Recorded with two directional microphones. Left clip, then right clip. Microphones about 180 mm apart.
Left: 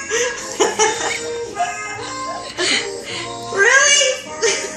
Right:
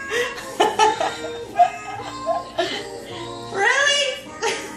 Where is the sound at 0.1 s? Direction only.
45° right (ahead or behind).